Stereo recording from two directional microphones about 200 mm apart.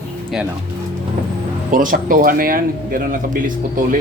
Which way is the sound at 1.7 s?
40° right (ahead or behind).